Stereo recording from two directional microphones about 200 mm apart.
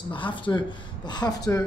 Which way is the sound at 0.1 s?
25° left (ahead or behind).